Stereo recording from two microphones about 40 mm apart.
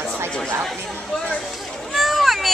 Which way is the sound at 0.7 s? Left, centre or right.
Centre.